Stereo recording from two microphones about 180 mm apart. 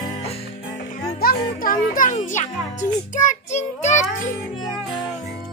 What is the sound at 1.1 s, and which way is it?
Music, 55° left (ahead or behind).